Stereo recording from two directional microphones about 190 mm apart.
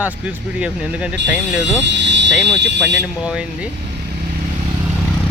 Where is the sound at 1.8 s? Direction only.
70° right (ahead or behind).